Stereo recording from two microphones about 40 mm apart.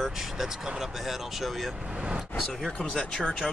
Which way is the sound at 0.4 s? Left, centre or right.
Centre.